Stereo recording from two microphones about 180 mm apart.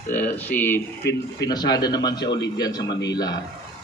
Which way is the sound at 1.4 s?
20° left (ahead or behind).